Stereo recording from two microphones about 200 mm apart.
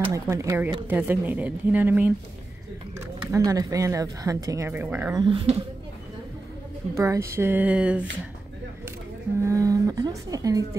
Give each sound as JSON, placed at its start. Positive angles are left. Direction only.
{"t": 0.1, "sound": "a woman's voice", "side_deg": -15}
{"t": 3.3, "sound": "a woman's voice", "side_deg": -15}
{"t": 5.2, "sound": "speech", "side_deg": -25}
{"t": 7.0, "sound": "a woman's voice", "side_deg": -15}
{"t": 9.4, "sound": "a woman's voice", "side_deg": -15}